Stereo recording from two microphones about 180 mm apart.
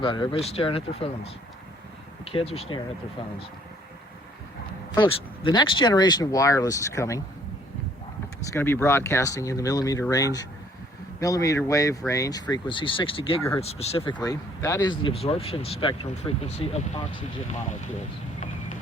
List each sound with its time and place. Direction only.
0.0 s speech: 30° left (ahead or behind)
4.9 s speech: 25° left (ahead or behind)
8.4 s speech: 15° left (ahead or behind); by 14.0 s 35° left (ahead or behind)
14.0 s speech: 20° left (ahead or behind)